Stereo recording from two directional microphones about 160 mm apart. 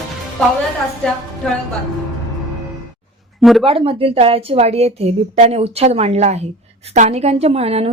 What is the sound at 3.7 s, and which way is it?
A woman's voice, 35° right (ahead or behind).